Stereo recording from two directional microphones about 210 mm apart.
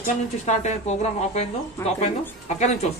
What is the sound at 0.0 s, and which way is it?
Speech, 35° left (ahead or behind).